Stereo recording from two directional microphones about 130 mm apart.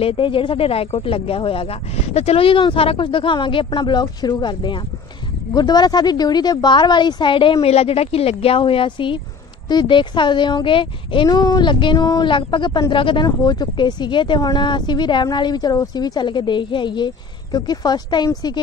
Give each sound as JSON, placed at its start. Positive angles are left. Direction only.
{"t": 0.0, "sound": "speech", "side_deg": 45}